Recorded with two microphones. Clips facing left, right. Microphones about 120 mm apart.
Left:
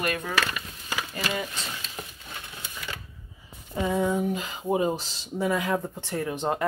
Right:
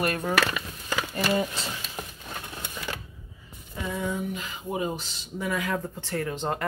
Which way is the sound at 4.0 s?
30° left (ahead or behind).